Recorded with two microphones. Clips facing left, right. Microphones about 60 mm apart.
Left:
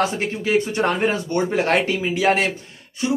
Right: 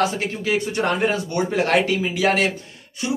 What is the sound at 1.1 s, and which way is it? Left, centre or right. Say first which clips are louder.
Speech: left 1 dB; centre.